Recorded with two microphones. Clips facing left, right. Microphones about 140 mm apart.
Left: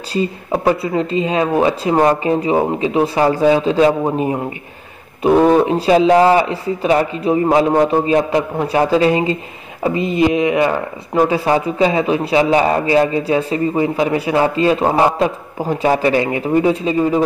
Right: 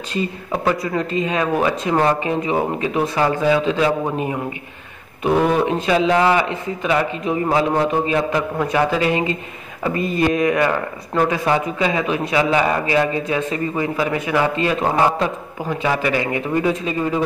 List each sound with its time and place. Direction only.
0.1 s speech: 35° left (ahead or behind)